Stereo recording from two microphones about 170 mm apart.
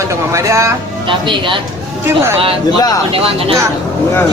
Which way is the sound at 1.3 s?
30° right (ahead or behind).